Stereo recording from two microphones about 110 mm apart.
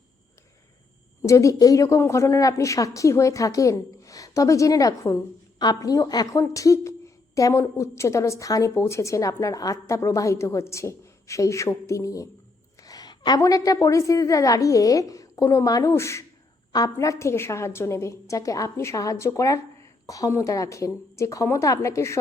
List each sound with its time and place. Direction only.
1.3 s a woman's voice: 30° left (ahead or behind)